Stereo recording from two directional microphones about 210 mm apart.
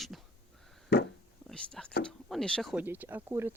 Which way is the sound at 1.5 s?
5° left (ahead or behind).